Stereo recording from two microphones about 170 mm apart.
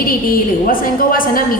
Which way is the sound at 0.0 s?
55° left (ahead or behind).